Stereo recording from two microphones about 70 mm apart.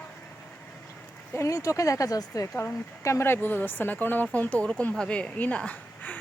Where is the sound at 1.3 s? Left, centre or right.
Left.